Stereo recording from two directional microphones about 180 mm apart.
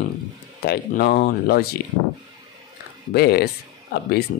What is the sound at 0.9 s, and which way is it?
Speech, 50° left (ahead or behind).